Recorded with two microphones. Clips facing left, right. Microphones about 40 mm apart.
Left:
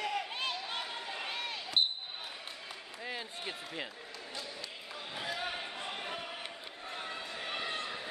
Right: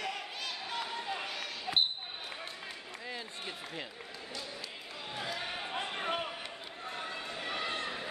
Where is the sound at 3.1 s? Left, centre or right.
Centre.